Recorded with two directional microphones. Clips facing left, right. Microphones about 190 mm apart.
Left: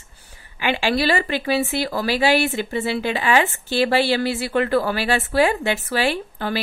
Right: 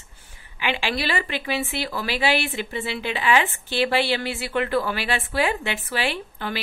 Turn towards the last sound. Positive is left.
turn(degrees=40)  # may be behind; listen again after turning